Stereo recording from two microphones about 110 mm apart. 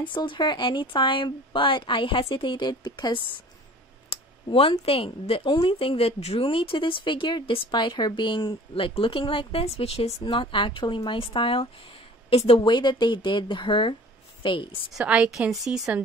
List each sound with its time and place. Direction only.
0.1 s speech: 45° left (ahead or behind)
4.1 s speech: 55° left (ahead or behind); by 10.1 s 70° left (ahead or behind)
10.2 s speech: 50° left (ahead or behind)
14.9 s a woman's voice: 5° right (ahead or behind)